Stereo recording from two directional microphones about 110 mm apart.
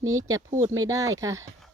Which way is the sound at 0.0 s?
30° right (ahead or behind).